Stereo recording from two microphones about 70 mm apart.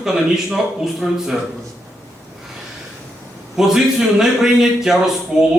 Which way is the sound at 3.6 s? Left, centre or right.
Centre.